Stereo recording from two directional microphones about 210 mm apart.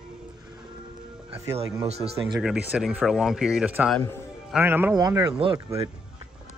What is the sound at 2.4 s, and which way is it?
A man's voice, 5° right (ahead or behind).